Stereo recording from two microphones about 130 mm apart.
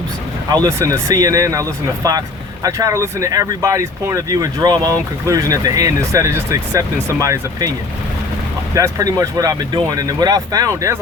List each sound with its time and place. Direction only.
0.5 s speech: 30° right (ahead or behind)
8.7 s speech: 25° right (ahead or behind)